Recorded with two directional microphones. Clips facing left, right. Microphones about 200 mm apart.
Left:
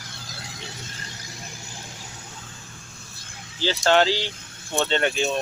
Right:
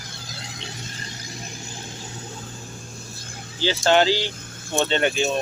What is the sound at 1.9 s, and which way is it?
Vehicle, 25° right (ahead or behind).